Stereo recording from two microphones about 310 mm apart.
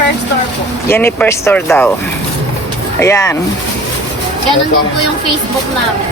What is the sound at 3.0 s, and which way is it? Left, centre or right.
Speech, centre.